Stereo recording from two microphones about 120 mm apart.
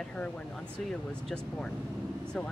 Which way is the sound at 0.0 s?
10° left (ahead or behind).